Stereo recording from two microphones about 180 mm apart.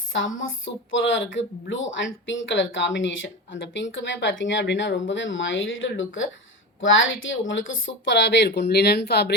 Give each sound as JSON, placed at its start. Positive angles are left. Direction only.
{"t": 0.1, "sound": "a woman's voice", "side_deg": 90}